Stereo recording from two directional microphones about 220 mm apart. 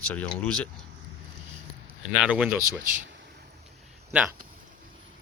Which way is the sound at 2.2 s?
5° right (ahead or behind).